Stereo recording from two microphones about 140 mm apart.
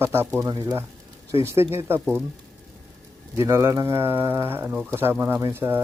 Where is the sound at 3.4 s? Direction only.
20° right (ahead or behind).